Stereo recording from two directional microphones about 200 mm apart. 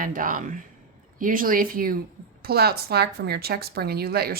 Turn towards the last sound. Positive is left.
turn(degrees=-50)  # may be behind; listen again after turning